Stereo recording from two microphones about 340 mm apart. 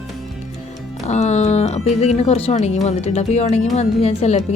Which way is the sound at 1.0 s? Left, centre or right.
Centre.